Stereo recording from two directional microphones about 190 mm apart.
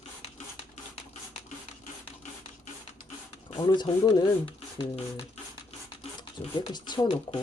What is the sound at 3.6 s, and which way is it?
Speech, 20° left (ahead or behind).